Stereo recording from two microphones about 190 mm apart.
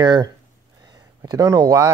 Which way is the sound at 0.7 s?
20° right (ahead or behind).